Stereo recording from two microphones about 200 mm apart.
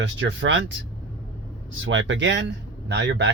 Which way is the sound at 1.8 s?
70° right (ahead or behind).